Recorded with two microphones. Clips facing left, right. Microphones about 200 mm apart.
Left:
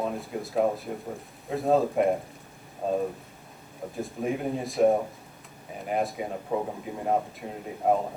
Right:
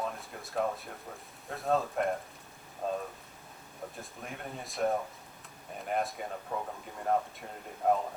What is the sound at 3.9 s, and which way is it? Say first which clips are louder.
Speech: left 14 dB; centre (ahead or behind).